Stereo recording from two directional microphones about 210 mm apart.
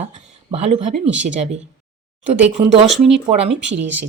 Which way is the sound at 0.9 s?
5° right (ahead or behind).